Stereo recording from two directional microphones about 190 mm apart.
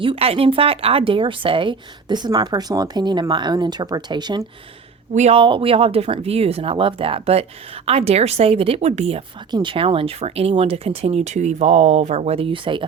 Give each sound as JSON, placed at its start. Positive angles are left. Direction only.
{"t": 0.0, "sound": "speech", "side_deg": -30}
{"t": 5.1, "sound": "speech", "side_deg": -35}